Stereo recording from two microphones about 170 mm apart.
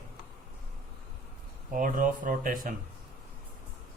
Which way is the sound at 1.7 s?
50° right (ahead or behind).